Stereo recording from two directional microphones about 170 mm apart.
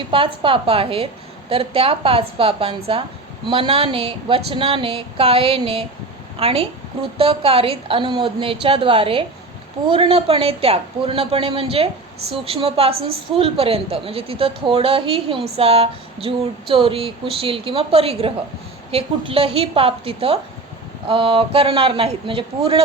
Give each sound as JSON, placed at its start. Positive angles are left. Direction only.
{"t": 0.1, "sound": "a woman's voice", "side_deg": -30}